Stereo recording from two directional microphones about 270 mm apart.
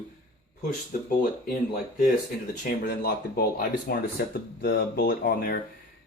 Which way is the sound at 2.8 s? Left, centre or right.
Left.